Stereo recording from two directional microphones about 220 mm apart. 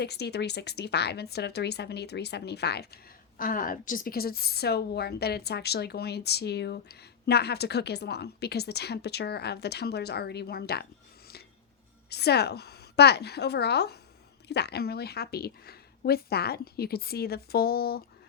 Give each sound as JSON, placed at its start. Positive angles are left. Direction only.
{"t": 0.0, "sound": "speech", "side_deg": 50}
{"t": 12.0, "sound": "speech", "side_deg": 50}